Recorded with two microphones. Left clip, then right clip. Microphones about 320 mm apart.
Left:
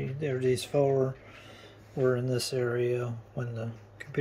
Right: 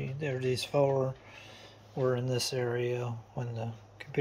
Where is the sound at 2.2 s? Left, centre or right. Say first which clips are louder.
Left 1 dB; centre.